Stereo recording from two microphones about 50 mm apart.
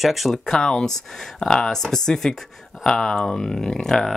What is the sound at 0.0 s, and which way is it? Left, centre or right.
Speech, centre.